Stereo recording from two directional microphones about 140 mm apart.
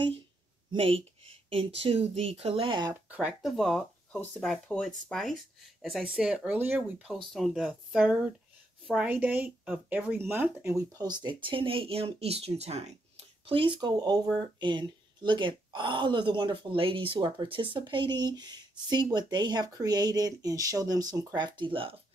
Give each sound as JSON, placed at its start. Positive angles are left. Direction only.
{"t": 0.7, "sound": "speech", "side_deg": -40}
{"t": 2.9, "sound": "speech", "side_deg": -10}
{"t": 7.3, "sound": "speech", "side_deg": 0}
{"t": 13.5, "sound": "speech", "side_deg": -35}